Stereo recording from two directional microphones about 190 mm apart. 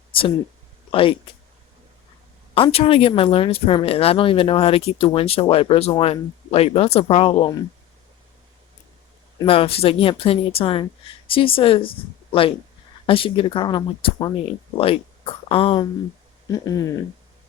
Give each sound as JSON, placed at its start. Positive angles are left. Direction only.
{"t": 0.1, "sound": "a sound", "side_deg": 30}
{"t": 0.9, "sound": "speech", "side_deg": 30}
{"t": 2.6, "sound": "speech", "side_deg": 30}
{"t": 9.5, "sound": "speech", "side_deg": 30}
{"t": 16.5, "sound": "speech", "side_deg": 15}